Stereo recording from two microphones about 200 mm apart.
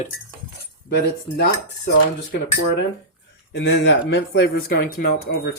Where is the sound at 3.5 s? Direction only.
60° left (ahead or behind).